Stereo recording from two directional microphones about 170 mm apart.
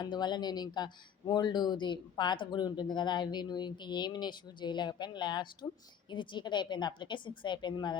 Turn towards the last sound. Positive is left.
turn(degrees=25)  # may be behind; listen again after turning